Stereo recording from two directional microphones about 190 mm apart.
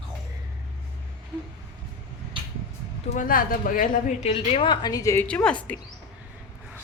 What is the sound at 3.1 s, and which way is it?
A woman's voice, 45° left (ahead or behind).